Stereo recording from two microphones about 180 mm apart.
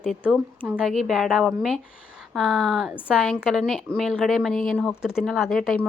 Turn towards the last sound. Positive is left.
turn(degrees=0)  # may be behind; listen again after turning